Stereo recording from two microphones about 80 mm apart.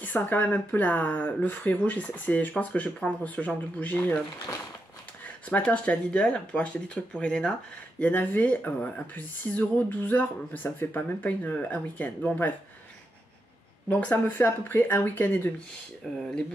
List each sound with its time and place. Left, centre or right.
0.0 s speech: left
5.6 s speech: centre
13.8 s speech: centre
16.2 s speech: centre